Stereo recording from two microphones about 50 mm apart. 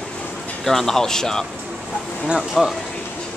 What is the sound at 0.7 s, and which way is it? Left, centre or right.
Speech, centre.